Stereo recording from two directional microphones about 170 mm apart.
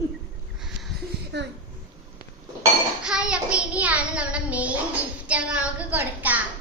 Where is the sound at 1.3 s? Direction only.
80° right.